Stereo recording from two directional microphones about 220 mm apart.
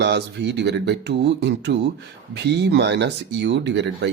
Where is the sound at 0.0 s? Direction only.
50° right (ahead or behind).